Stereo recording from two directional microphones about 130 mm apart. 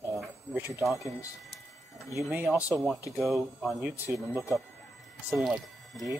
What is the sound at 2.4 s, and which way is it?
Speech, 5° right (ahead or behind).